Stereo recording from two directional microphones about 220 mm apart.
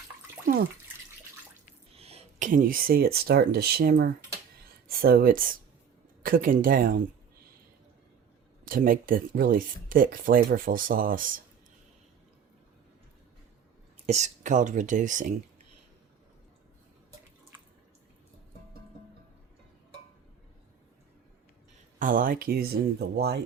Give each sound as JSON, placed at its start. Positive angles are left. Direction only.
{"t": 2.0, "sound": "speech", "side_deg": -25}
{"t": 8.6, "sound": "speech", "side_deg": -40}
{"t": 14.1, "sound": "speech", "side_deg": -35}
{"t": 21.9, "sound": "speech", "side_deg": -35}